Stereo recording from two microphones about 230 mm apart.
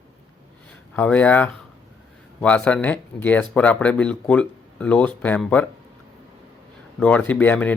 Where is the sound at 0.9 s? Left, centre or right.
Centre.